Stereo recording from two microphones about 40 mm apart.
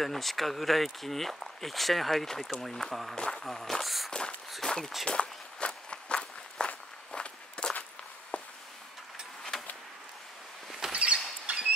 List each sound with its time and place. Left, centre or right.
0.0 s speech: centre
3.2 s speech: left
3.4 s speech: centre
4.6 s speech: centre
5.0 s walk: left
10.9 s vehicle: right
11.5 s rodents: right